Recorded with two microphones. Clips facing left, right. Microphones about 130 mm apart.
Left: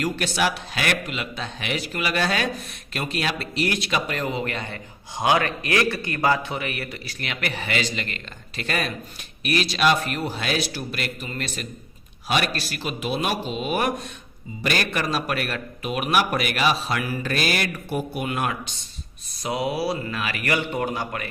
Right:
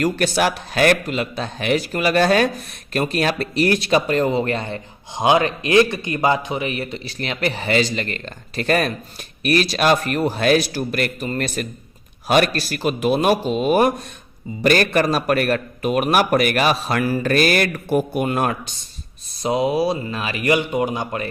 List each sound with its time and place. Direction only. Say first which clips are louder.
0.0 s a man's voice: right 5 dB; 45° right (ahead or behind)
19.4 s speech: right 6 dB; 25° right (ahead or behind)